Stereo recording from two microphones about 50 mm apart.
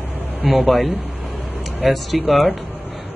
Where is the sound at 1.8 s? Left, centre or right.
Centre.